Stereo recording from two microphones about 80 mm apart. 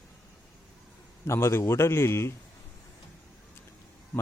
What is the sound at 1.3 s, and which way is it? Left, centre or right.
Speech, left.